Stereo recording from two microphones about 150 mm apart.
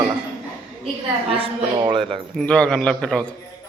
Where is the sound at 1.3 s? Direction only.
35° right (ahead or behind).